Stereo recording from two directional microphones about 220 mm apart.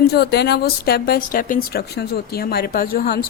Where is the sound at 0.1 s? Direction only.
50° left (ahead or behind).